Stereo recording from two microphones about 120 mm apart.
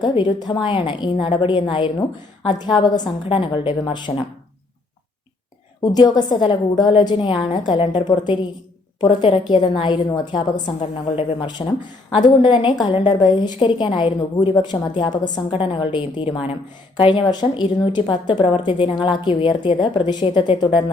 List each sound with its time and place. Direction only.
0.0 s a woman's voice: 40° left (ahead or behind)
5.8 s a woman's voice: 35° left (ahead or behind)